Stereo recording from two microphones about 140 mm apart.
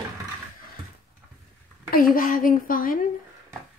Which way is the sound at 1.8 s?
90° left.